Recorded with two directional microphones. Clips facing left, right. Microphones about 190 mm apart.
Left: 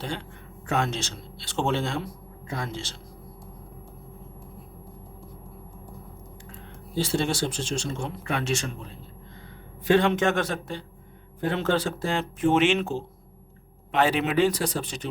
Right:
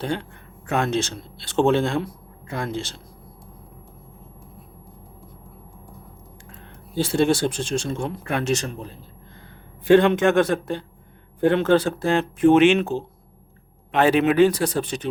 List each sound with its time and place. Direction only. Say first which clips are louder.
0.0 s speech: right 7 dB; 55° right (ahead or behind)
6.9 s speech: right 6 dB; 55° right (ahead or behind)
10.0 s speech: right 6 dB; 55° right (ahead or behind)